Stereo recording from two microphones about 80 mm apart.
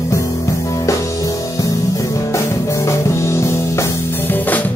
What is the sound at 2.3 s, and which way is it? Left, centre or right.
Music, left.